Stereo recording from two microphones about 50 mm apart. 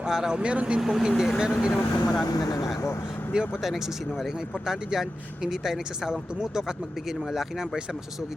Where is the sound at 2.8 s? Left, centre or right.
Left.